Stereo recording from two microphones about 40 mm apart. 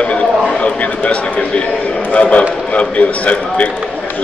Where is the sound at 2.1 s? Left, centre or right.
Left.